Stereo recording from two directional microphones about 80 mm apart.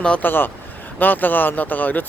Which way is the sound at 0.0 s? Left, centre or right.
Centre.